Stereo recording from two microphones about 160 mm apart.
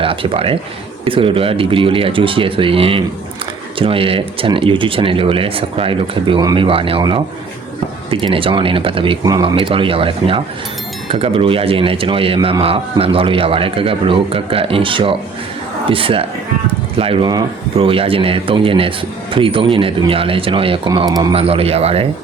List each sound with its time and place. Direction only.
0.0 s a man's voice: 35° right (ahead or behind)
21.3 s a man's voice: 35° right (ahead or behind)